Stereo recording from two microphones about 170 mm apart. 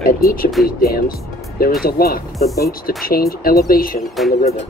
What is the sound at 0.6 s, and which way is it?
Speech, 65° left (ahead or behind).